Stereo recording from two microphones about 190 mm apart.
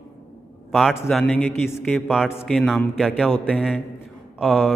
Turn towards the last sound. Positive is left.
turn(degrees=0)  # may be behind; listen again after turning